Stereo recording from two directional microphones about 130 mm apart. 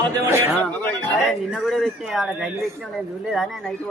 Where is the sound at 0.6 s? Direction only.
15° left (ahead or behind).